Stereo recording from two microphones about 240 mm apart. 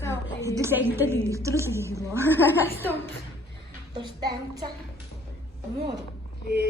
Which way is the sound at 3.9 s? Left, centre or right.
Centre.